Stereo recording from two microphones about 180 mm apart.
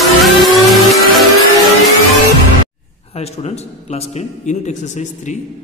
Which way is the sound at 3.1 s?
35° left (ahead or behind).